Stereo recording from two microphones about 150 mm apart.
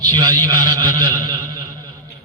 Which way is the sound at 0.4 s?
25° right (ahead or behind).